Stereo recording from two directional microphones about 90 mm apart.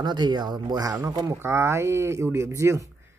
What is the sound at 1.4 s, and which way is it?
Speech, 30° right (ahead or behind).